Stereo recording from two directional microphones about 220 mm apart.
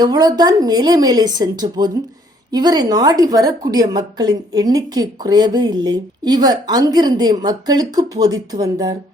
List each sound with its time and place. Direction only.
0.0 s a woman's voice: 20° right (ahead or behind)